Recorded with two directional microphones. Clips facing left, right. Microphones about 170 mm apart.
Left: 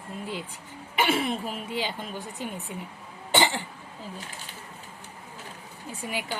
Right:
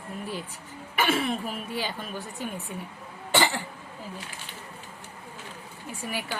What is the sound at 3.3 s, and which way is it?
Cough, 20° left (ahead or behind).